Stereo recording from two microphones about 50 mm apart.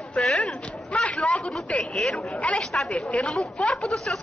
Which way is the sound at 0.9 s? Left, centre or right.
Left.